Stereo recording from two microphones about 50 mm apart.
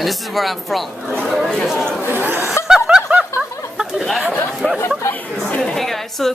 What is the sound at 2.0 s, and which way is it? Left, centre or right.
Speech, right.